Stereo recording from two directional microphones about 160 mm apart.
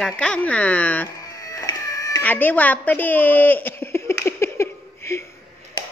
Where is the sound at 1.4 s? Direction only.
20° left (ahead or behind).